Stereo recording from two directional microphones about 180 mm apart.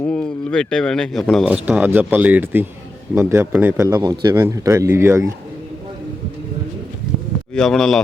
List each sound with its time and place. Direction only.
0.0 s a man's voice: 5° left (ahead or behind); by 5.3 s 15° right (ahead or behind)
7.5 s speech: 5° left (ahead or behind)